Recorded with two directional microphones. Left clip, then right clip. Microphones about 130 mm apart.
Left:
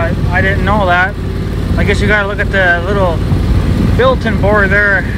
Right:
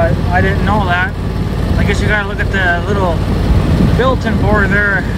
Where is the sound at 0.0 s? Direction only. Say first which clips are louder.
Even; 25° right (ahead or behind).